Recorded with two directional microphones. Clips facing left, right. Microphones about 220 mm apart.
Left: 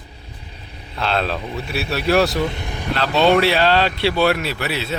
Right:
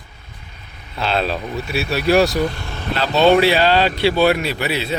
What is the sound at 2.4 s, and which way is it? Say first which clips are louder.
Speech: right 1 dB; 20° left (ahead or behind).